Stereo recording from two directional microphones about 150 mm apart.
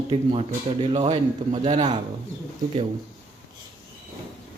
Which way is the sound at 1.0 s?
50° right (ahead or behind).